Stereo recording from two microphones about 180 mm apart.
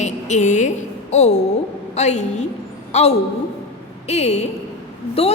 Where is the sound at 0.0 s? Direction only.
40° left (ahead or behind).